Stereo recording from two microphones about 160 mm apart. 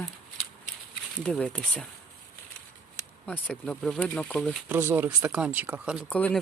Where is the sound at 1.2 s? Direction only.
5° left (ahead or behind).